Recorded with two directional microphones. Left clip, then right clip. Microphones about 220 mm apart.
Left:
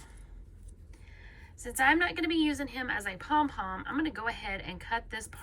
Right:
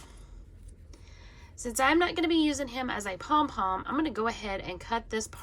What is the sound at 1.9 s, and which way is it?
A woman's voice, 15° right (ahead or behind).